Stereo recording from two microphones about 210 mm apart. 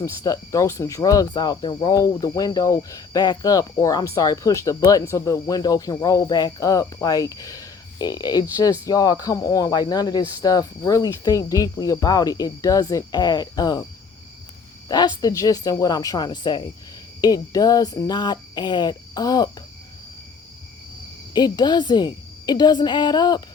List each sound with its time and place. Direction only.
0.0 s speech: 15° left (ahead or behind)
14.8 s speech: 20° left (ahead or behind)
21.3 s speech: 20° left (ahead or behind)